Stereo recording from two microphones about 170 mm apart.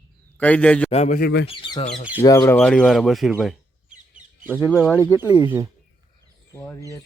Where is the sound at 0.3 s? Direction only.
10° left (ahead or behind).